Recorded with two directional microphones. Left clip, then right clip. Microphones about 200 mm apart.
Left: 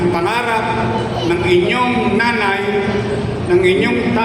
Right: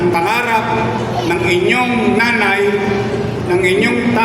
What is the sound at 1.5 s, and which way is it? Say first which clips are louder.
Music: even; 35° right (ahead or behind).